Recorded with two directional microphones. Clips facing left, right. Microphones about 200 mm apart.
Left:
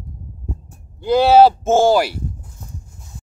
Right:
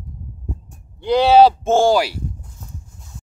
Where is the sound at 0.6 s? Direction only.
5° left (ahead or behind).